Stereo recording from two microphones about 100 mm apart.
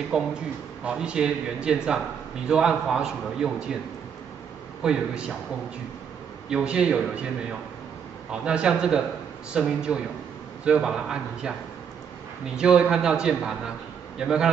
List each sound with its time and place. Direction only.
0.1 s a man's voice: 5° right (ahead or behind)
4.8 s a man's voice: 10° right (ahead or behind)
6.5 s a man's voice: 10° right (ahead or behind)
8.3 s a man's voice: 10° right (ahead or behind)
12.5 s a man's voice: 10° right (ahead or behind)